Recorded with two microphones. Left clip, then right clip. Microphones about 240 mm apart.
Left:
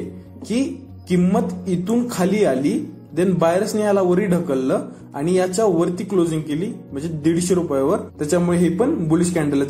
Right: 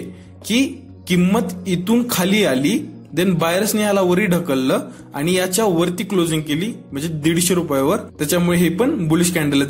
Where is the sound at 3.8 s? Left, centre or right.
Right.